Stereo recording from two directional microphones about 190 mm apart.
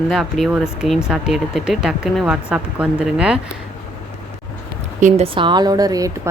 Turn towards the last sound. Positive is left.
turn(degrees=-20)  # may be behind; listen again after turning